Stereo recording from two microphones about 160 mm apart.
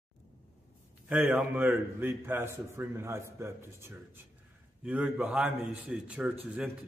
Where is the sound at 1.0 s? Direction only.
10° right (ahead or behind).